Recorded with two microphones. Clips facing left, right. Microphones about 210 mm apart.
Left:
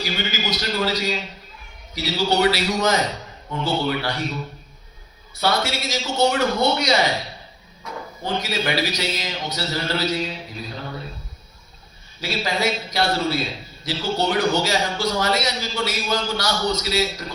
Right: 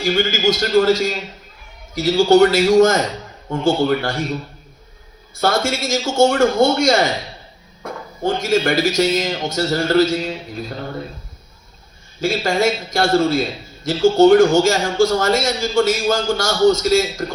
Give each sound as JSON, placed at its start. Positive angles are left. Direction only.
{"t": 0.0, "sound": "a man's voice", "side_deg": -50}
{"t": 5.3, "sound": "a man's voice", "side_deg": -50}
{"t": 12.2, "sound": "a man's voice", "side_deg": -50}